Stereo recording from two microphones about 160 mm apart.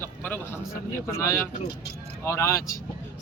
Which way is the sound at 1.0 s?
20° left (ahead or behind).